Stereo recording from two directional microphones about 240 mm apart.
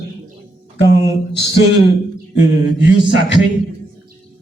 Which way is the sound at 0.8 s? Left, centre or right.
Left.